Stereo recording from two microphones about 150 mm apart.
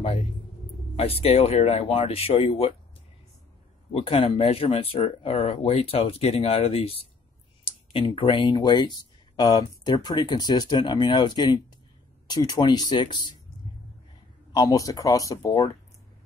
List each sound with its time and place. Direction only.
0.9 s speech: 40° left (ahead or behind)
3.9 s speech: 40° left (ahead or behind)
14.5 s speech: 25° left (ahead or behind)